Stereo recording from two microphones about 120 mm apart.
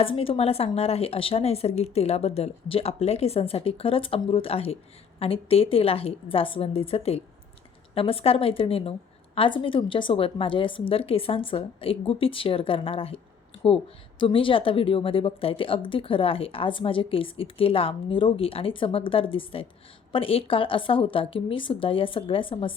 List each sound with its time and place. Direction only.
0.0 s a woman's voice: 50° left (ahead or behind)
14.2 s a woman's voice: 45° left (ahead or behind)